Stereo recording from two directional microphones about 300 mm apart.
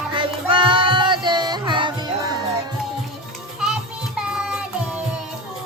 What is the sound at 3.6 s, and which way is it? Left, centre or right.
Music, centre.